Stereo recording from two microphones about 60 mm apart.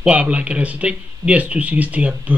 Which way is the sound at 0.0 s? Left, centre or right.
Right.